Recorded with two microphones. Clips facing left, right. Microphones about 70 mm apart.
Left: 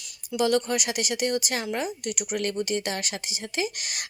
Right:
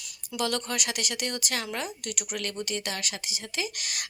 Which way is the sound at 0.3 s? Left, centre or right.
Centre.